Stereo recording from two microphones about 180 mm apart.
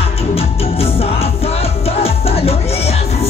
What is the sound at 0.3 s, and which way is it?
Music, 30° left (ahead or behind).